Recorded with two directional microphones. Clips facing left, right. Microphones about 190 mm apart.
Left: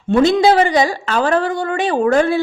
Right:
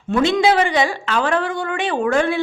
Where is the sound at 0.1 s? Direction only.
35° left (ahead or behind).